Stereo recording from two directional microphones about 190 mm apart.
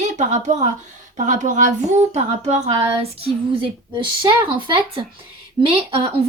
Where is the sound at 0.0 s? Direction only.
40° right (ahead or behind); by 5.0 s 25° right (ahead or behind).